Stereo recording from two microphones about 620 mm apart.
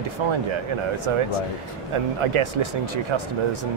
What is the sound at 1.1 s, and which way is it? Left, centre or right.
Speech, right.